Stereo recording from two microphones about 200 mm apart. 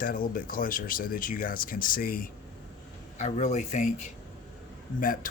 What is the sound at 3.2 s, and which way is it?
Speech, 35° left (ahead or behind).